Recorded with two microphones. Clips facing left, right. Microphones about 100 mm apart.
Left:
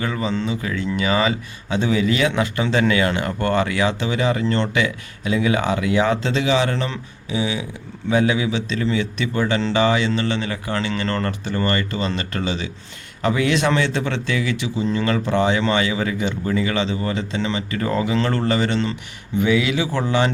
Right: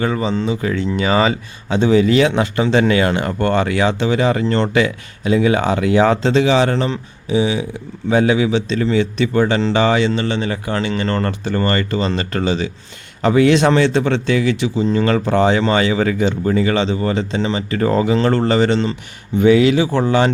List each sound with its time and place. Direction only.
0.0 s speech: 30° right (ahead or behind)
0.6 s speech: 40° right (ahead or behind)
10.2 s speech: 20° right (ahead or behind)
19.4 s speech: 40° right (ahead or behind)